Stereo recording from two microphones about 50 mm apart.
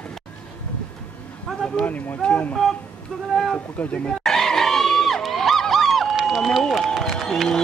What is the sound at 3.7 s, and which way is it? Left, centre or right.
Speech, left.